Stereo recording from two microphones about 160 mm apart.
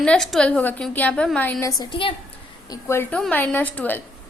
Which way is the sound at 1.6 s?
30° left (ahead or behind).